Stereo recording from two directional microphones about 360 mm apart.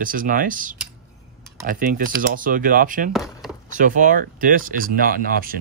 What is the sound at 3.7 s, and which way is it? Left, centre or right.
Speech, right.